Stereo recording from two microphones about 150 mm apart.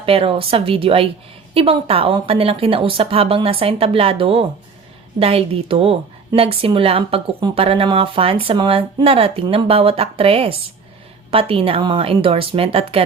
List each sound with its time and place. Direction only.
0.0 s a woman's voice: 40° right (ahead or behind)